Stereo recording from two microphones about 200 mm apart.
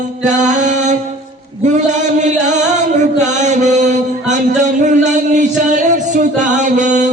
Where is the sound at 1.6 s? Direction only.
35° right (ahead or behind).